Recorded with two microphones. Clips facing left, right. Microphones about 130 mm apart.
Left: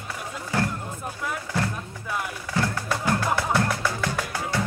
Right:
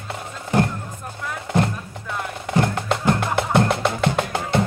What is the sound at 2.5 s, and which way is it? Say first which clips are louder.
Music: right 6 dB; 20° right (ahead or behind).